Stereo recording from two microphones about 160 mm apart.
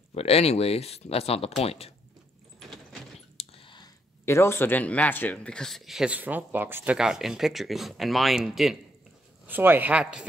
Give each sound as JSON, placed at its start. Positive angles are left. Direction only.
{"t": 0.1, "sound": "speech", "side_deg": 40}
{"t": 2.7, "sound": "vehicle", "side_deg": 0}
{"t": 3.3, "sound": "a sound", "side_deg": 35}
{"t": 4.3, "sound": "speech", "side_deg": 15}
{"t": 9.5, "sound": "speech", "side_deg": -10}